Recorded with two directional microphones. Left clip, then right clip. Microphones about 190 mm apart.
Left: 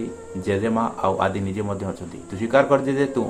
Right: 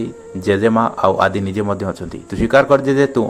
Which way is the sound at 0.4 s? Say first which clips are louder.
Right 8 dB; 40° right (ahead or behind).